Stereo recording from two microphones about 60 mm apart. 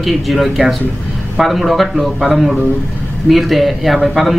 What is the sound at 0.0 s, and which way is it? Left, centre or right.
A man's voice, centre.